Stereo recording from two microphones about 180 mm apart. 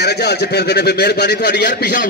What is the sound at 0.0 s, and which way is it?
A man's voice, 65° left (ahead or behind).